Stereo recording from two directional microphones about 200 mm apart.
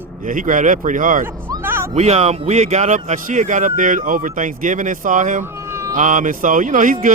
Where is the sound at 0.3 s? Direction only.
40° right (ahead or behind).